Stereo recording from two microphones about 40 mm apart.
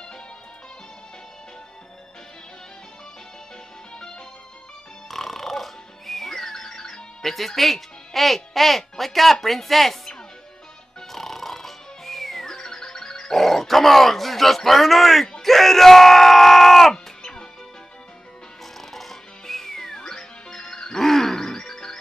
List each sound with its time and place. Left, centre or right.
3.9 s music: centre
5.0 s music: centre
7.2 s speech: centre
11.0 s music: centre
15.4 s screaming: centre
17.2 s music: centre
18.9 s music: centre